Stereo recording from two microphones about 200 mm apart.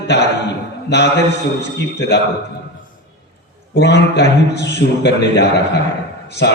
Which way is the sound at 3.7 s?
55° left (ahead or behind).